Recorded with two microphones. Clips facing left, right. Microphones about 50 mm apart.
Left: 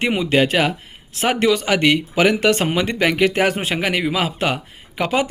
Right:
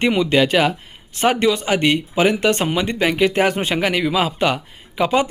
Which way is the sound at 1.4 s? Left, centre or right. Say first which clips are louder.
Left 1 dB; left.